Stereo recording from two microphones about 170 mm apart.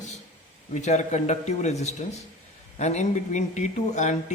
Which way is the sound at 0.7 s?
45° left (ahead or behind).